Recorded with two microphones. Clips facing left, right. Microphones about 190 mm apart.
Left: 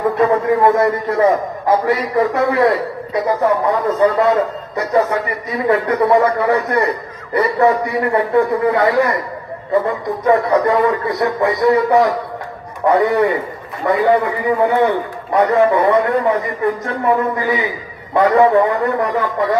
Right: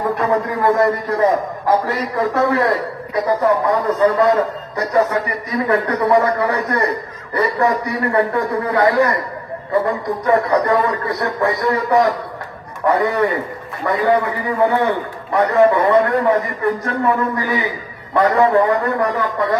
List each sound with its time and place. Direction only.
0.1 s a man's voice: 20° left (ahead or behind)